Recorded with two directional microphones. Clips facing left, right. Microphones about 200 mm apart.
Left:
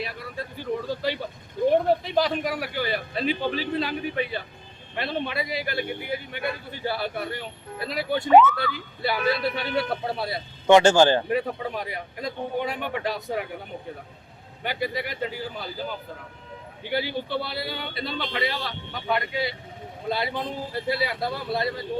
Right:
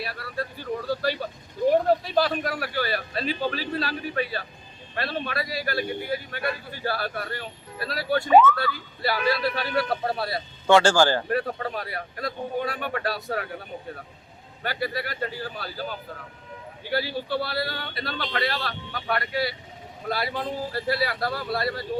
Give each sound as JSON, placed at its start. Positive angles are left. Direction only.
{"t": 0.0, "sound": "a man's voice", "side_deg": 20}
{"t": 14.6, "sound": "speech", "side_deg": 15}
{"t": 16.9, "sound": "a man's voice", "side_deg": 20}